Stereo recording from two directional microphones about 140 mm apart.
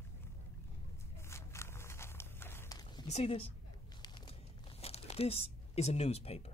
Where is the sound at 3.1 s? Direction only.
45° left (ahead or behind).